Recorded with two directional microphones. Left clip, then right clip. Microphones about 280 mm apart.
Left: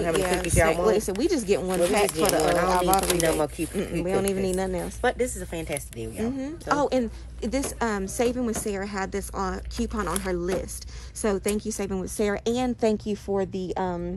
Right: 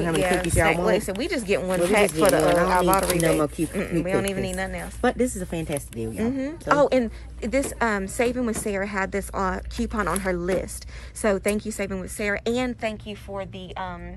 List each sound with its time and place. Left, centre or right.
0.2 s a woman's voice: centre
5.0 s speech: right
6.1 s a woman's voice: centre
13.0 s speech: left